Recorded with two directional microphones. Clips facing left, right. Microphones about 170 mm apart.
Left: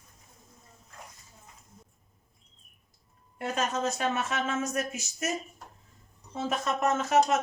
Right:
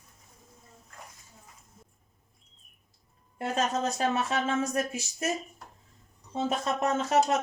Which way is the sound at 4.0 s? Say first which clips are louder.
Right 2 dB; 35° right (ahead or behind).